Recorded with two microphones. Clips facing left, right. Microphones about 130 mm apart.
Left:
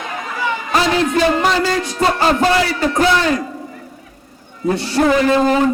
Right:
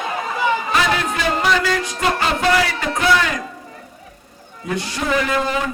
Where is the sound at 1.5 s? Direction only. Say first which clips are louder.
Left 2 dB; 35° left (ahead or behind).